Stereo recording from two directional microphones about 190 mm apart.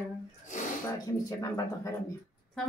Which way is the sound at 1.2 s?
15° left (ahead or behind).